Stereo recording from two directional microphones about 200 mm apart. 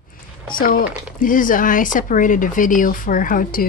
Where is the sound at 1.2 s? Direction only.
40° left (ahead or behind).